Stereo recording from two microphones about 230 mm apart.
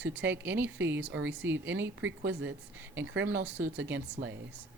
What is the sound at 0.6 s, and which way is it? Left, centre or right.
Speech, right.